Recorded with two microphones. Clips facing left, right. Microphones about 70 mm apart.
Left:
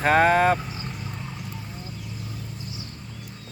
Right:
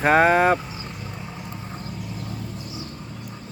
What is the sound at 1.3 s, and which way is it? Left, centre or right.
Vehicle, right.